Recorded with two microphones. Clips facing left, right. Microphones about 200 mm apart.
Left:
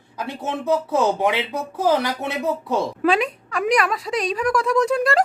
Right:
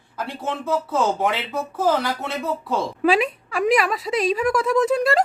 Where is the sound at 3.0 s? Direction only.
5° right (ahead or behind).